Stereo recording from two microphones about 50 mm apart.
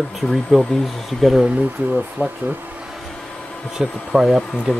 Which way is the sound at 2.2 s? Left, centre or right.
Right.